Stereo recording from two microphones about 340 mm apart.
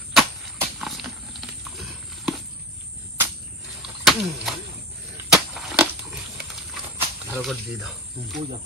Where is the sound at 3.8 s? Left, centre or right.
Centre.